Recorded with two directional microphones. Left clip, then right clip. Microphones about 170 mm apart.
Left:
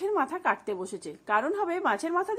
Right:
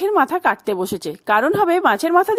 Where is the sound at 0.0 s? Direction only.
65° right (ahead or behind).